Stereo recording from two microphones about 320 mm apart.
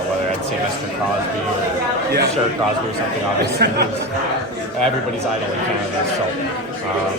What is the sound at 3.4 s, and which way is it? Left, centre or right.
Speech, right.